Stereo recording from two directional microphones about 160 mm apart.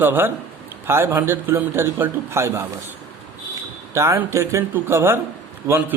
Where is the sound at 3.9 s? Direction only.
15° right (ahead or behind).